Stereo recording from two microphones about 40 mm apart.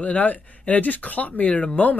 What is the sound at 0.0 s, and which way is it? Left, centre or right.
Speech, left.